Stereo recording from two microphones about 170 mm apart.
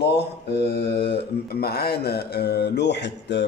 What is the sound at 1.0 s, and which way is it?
Mantra, 70° left (ahead or behind).